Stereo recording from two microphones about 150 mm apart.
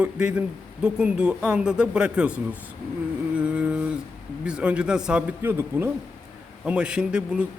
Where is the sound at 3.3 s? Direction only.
5° right (ahead or behind).